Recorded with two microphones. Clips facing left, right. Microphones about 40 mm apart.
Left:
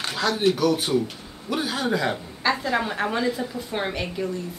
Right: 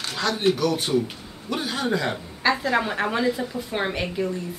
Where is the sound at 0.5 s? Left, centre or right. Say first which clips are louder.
Even; centre.